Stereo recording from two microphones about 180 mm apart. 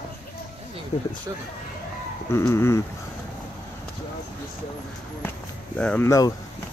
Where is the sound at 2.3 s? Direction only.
15° left (ahead or behind).